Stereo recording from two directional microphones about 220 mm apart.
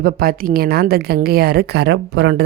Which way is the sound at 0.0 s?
45° right (ahead or behind).